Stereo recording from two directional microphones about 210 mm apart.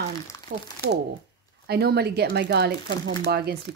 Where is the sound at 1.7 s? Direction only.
50° right (ahead or behind).